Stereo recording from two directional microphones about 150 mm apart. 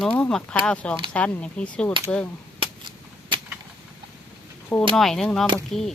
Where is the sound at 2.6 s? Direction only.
30° right (ahead or behind).